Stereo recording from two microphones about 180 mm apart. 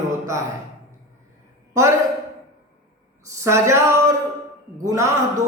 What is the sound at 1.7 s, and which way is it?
Speech, 15° right (ahead or behind).